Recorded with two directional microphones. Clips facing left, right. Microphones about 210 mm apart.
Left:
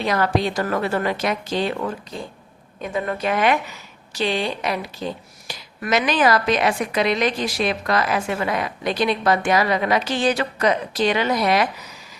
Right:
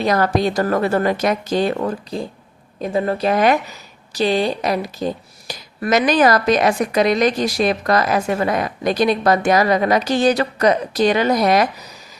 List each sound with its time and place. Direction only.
0.0 s a woman's voice: 40° right (ahead or behind)